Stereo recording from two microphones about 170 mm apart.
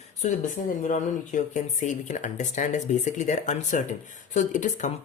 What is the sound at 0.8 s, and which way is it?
Speech, 45° left (ahead or behind).